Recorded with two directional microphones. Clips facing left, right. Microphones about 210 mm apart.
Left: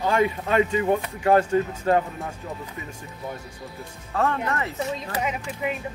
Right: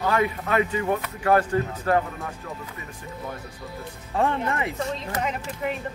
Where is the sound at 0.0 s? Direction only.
25° left (ahead or behind).